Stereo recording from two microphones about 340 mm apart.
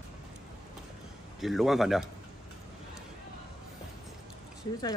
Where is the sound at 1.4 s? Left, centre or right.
Centre.